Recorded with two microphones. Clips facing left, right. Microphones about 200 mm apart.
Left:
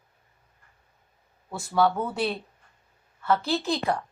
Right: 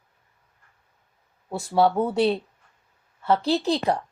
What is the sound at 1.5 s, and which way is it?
Speech, 35° right (ahead or behind).